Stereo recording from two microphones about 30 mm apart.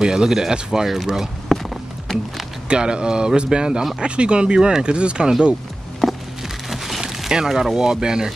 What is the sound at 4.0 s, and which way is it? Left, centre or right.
Speech, right.